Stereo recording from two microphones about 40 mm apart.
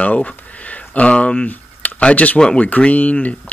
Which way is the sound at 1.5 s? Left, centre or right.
Left.